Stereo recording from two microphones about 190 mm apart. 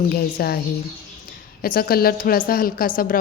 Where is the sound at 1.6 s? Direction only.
50° left (ahead or behind).